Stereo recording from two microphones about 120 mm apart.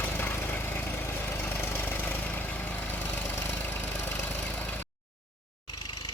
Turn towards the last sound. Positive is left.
turn(degrees=15)  # may be behind; listen again after turning